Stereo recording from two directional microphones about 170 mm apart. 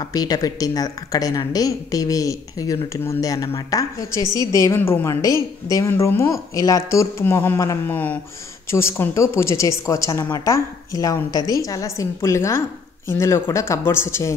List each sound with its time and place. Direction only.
0.0 s a woman's voice: 20° left (ahead or behind)